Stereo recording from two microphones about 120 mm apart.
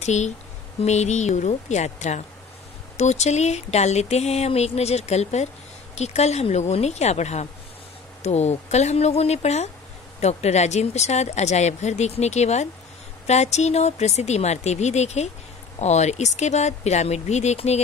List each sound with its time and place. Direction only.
0.0 s speech: 70° left (ahead or behind)